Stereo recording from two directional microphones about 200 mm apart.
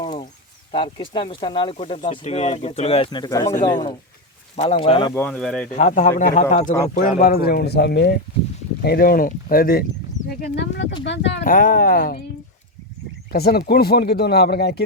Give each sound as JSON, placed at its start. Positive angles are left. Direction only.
{"t": 0.7, "sound": "speech", "side_deg": 25}
{"t": 5.1, "sound": "speech", "side_deg": 5}
{"t": 5.7, "sound": "speech", "side_deg": 35}
{"t": 11.4, "sound": "speech", "side_deg": 45}
{"t": 13.3, "sound": "speech", "side_deg": 50}